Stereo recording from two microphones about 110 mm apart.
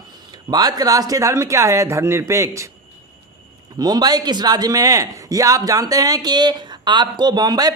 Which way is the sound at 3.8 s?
35° right (ahead or behind).